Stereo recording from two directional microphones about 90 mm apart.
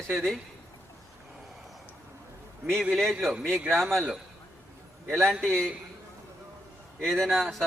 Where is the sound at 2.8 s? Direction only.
Centre (ahead or behind).